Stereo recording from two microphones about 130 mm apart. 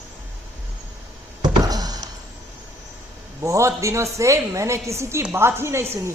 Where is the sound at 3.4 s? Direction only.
25° right (ahead or behind).